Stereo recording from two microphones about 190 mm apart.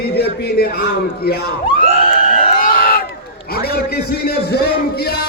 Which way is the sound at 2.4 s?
45° left (ahead or behind).